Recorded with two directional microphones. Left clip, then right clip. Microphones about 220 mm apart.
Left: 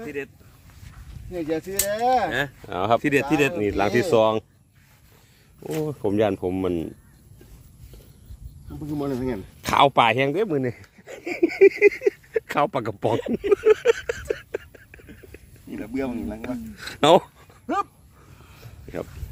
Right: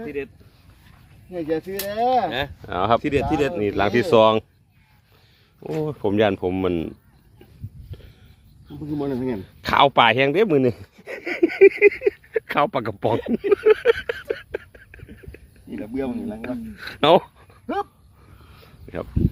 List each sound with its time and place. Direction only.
0.0 s speech: 20° left (ahead or behind)
1.3 s speech: 15° right (ahead or behind); by 3.0 s 5° left (ahead or behind)
3.0 s speech: 40° left (ahead or behind)
3.5 s speech: 10° left (ahead or behind)
4.1 s speech: 5° right (ahead or behind)
5.6 s speech: 5° left (ahead or behind)
9.0 s speech: 10° left (ahead or behind)
10.3 s speech: 15° right (ahead or behind)
11.1 s a sound: centre (ahead or behind)
18.9 s speech: 10° left (ahead or behind)